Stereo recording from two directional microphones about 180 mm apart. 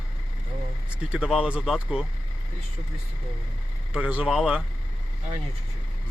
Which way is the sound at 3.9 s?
5° right (ahead or behind).